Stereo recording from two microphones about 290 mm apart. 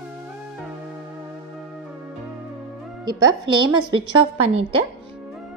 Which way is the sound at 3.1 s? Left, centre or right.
Centre.